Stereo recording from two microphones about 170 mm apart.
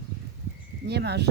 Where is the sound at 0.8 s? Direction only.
80° right.